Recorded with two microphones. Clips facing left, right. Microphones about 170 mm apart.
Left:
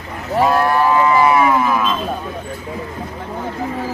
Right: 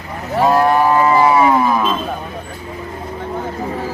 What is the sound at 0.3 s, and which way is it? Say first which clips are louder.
Cattle: right 2 dB; 15° right (ahead or behind).